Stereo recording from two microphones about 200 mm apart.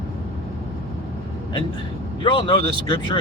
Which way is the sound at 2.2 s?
25° left (ahead or behind).